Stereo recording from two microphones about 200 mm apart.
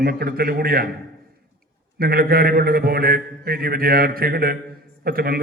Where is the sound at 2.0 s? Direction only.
50° right (ahead or behind).